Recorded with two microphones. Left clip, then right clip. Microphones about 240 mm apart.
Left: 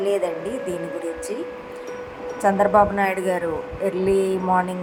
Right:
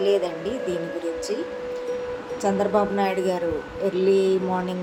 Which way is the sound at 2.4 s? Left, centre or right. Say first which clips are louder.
Left 6 dB; centre.